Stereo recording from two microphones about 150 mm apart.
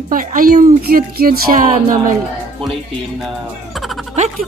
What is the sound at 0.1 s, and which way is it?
Speech, 65° right (ahead or behind).